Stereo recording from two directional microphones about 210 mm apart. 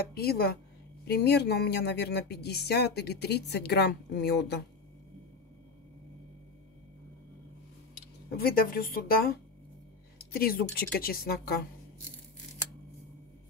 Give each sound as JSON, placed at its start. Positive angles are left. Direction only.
{"t": 0.1, "sound": "speech", "side_deg": 45}
{"t": 8.4, "sound": "speech", "side_deg": 45}